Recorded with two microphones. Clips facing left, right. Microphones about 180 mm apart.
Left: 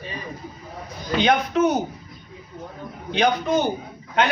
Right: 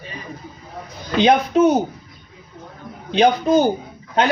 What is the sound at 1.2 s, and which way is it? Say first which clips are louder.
Speech: right 5 dB; 30° right (ahead or behind).